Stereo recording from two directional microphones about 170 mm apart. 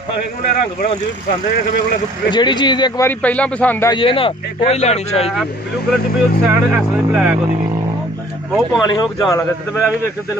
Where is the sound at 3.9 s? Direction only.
30° left (ahead or behind).